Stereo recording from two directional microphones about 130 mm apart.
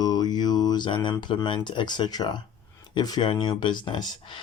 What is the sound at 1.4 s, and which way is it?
Speech, 35° left (ahead or behind).